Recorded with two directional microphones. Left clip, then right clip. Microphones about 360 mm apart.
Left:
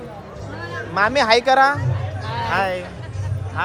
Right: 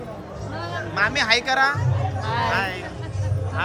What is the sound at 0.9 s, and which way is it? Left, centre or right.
Speech, centre.